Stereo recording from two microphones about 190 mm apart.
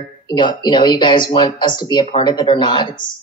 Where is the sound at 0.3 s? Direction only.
25° left (ahead or behind).